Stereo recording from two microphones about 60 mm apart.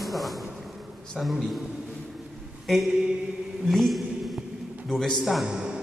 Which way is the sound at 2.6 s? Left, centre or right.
Centre.